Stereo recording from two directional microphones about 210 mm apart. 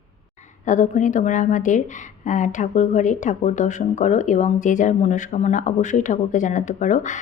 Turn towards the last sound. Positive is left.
turn(degrees=35)  # may be behind; listen again after turning